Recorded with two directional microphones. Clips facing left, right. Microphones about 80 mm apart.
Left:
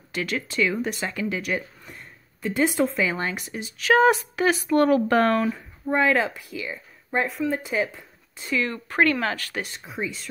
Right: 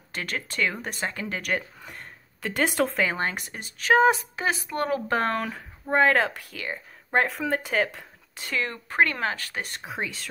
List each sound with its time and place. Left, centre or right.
0.1 s a woman's voice: right
1.4 s speech: right
3.9 s speech: right
5.4 s speech: right
7.4 s speech: right
7.9 s a sound: right
8.5 s speech: right
9.8 s speech: right